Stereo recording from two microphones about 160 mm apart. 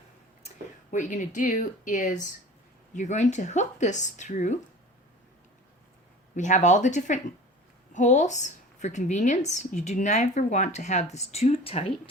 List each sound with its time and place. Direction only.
0.9 s a woman's voice: 50° left (ahead or behind)
6.3 s a woman's voice: 50° left (ahead or behind)